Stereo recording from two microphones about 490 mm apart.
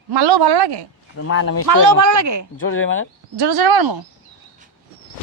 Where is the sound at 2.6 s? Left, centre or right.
Left.